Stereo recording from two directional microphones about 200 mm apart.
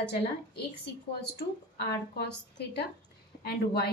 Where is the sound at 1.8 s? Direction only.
55° left (ahead or behind).